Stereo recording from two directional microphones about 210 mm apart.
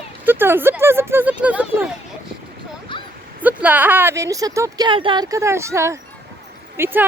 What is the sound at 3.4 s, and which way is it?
Speech, 10° right (ahead or behind).